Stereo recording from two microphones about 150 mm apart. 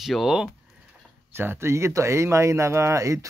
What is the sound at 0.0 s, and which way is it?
Speech, centre (ahead or behind).